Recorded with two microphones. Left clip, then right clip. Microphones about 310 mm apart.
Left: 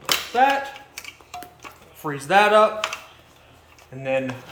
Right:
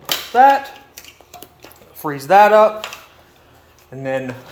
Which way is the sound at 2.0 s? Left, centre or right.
Centre.